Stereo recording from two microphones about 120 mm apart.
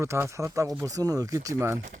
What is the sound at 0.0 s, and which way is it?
Speech, 25° right (ahead or behind).